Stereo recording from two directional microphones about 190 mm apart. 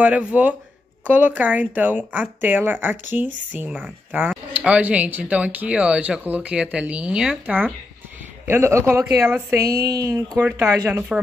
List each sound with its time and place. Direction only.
0.0 s speech: 5° right (ahead or behind)